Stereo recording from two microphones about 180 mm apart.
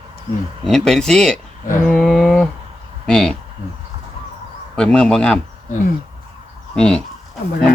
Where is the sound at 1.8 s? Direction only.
5° left (ahead or behind).